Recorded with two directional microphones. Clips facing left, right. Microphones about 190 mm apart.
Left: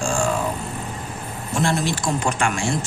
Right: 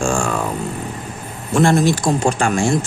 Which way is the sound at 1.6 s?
45° right (ahead or behind).